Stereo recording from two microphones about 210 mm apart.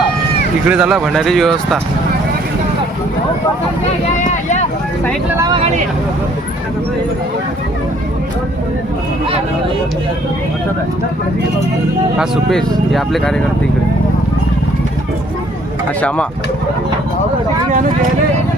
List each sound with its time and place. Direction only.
0.7 s speech: 5° right (ahead or behind)
4.2 s a sound: 35° left (ahead or behind)
12.1 s speech: centre (ahead or behind)
16.0 s speech: 5° left (ahead or behind)
17.7 s speech: 40° right (ahead or behind)